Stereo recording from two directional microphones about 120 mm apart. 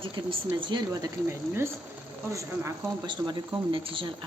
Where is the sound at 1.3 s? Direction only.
20° right (ahead or behind).